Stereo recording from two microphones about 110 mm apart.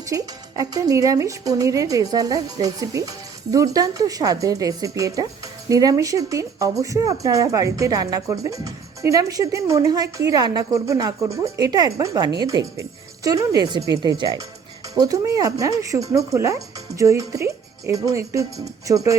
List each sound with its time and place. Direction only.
0.1 s speech: 30° right (ahead or behind)